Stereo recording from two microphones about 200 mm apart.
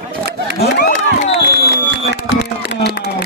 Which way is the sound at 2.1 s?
60° right (ahead or behind).